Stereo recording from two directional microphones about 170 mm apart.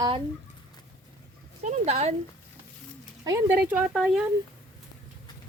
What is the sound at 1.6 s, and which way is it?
Speech, 40° right (ahead or behind).